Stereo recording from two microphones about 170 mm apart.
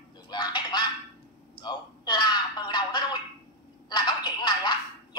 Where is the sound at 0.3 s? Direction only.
25° left (ahead or behind).